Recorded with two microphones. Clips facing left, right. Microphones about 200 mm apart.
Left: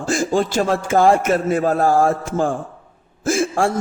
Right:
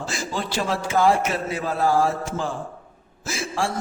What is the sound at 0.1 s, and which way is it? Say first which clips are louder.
A man's voice: left 13 dB; 50° left (ahead or behind).